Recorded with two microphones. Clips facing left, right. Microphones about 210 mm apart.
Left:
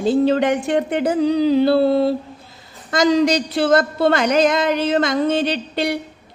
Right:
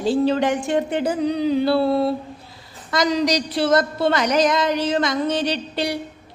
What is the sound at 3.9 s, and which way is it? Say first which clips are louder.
Speech: left 3 dB; 55° left (ahead or behind).